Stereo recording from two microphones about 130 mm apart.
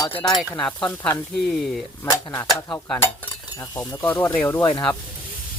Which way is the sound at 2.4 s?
20° left (ahead or behind).